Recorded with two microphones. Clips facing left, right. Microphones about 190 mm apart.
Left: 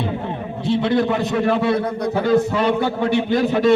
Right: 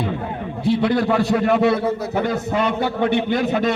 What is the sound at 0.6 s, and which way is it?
Speech, 25° left (ahead or behind).